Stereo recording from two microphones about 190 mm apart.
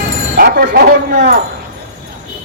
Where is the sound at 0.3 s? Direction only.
50° right (ahead or behind).